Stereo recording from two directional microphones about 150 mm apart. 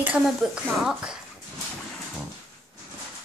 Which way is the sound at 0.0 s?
10° right (ahead or behind).